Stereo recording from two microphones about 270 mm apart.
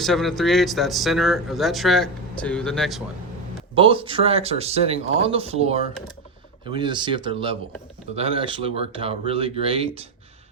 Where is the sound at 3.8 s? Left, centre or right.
Centre.